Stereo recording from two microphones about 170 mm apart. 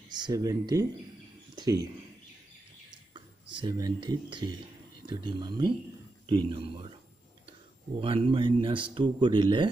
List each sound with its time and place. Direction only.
0.1 s a man's voice: 20° right (ahead or behind)
1.5 s a sound: 25° right (ahead or behind)
3.1 s a man's voice: 25° right (ahead or behind)
8.0 s a man's voice: 30° right (ahead or behind)